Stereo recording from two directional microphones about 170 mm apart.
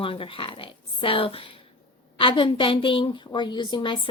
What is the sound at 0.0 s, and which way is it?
A woman's voice, 30° left (ahead or behind).